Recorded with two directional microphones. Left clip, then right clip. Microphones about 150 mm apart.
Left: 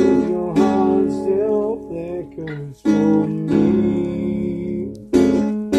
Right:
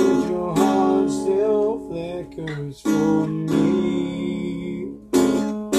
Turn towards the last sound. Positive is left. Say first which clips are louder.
# left 3 dB
turn(degrees=35)  # may be behind; listen again after turning